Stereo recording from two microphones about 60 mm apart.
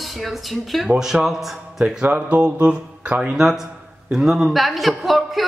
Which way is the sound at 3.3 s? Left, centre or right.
Centre.